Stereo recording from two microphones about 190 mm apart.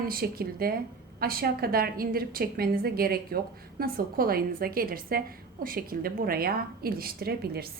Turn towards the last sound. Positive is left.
turn(degrees=-55)  # may be behind; listen again after turning